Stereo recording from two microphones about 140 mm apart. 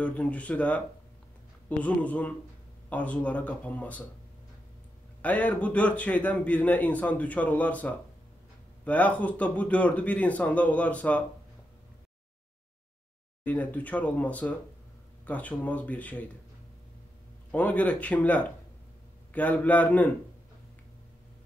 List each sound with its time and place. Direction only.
0.0 s a man's voice: 10° left (ahead or behind)
5.2 s a man's voice: 10° left (ahead or behind)
13.5 s a man's voice: 10° left (ahead or behind)
17.5 s a man's voice: 10° left (ahead or behind)